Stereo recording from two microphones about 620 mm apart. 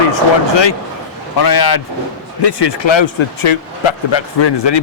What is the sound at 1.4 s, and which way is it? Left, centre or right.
Speech, left.